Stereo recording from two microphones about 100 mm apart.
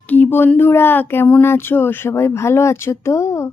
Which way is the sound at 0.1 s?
20° left (ahead or behind).